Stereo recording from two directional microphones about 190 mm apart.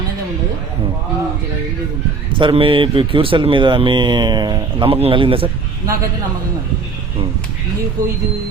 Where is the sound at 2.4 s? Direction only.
30° right (ahead or behind).